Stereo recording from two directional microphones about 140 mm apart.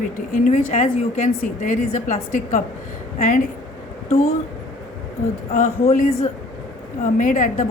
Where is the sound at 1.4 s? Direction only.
70° left (ahead or behind).